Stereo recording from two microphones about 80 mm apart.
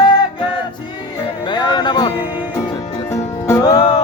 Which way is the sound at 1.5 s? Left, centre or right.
Left.